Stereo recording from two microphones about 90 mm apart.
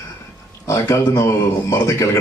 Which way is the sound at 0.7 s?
35° left (ahead or behind).